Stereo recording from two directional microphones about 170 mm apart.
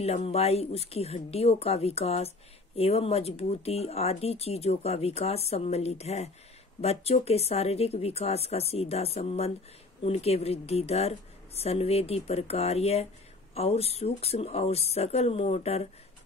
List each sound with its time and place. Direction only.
0.0 s speech: 35° left (ahead or behind)